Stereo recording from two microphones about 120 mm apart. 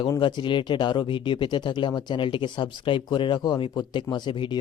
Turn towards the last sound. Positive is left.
turn(degrees=40)  # may be behind; listen again after turning